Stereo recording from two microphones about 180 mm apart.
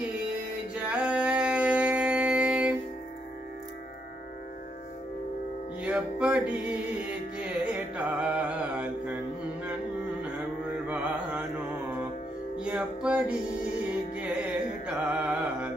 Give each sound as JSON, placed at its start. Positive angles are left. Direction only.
{"t": 0.8, "sound": "a sound", "side_deg": -5}
{"t": 5.8, "sound": "music", "side_deg": -5}
{"t": 10.7, "sound": "mantra", "side_deg": -5}
{"t": 12.5, "sound": "music", "side_deg": -5}